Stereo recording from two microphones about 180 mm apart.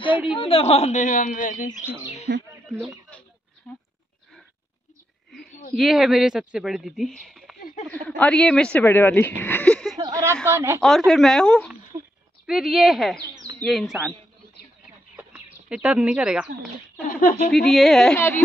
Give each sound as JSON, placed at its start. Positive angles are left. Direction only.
{"t": 0.4, "sound": "a woman's voice", "side_deg": 30}
{"t": 2.3, "sound": "speech", "side_deg": -50}
{"t": 2.7, "sound": "a woman's voice", "side_deg": -15}
{"t": 5.8, "sound": "speech", "side_deg": 0}
{"t": 9.9, "sound": "a sound", "side_deg": -25}
{"t": 10.4, "sound": "a woman's voice", "side_deg": -15}
{"t": 10.8, "sound": "speech", "side_deg": 0}
{"t": 15.7, "sound": "speech", "side_deg": -5}
{"t": 17.5, "sound": "speech", "side_deg": 0}